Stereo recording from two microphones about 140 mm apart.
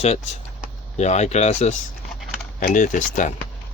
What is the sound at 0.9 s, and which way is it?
Speech, 55° left (ahead or behind).